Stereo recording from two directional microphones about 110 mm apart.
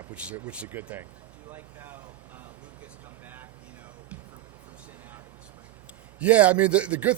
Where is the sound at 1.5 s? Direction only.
20° right (ahead or behind).